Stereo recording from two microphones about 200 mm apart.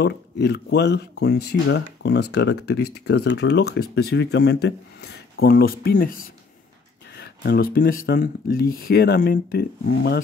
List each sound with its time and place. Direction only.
0.0 s speech: 55° left (ahead or behind)